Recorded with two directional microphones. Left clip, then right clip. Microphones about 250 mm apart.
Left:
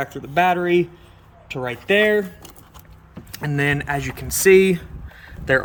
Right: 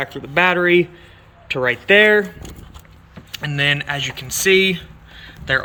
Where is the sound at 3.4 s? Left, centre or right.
Centre.